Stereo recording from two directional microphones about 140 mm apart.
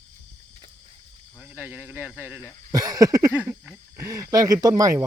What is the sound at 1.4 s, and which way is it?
Speech, 10° right (ahead or behind).